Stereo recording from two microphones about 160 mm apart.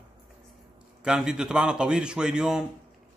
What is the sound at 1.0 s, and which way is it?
A man's voice, 5° right (ahead or behind).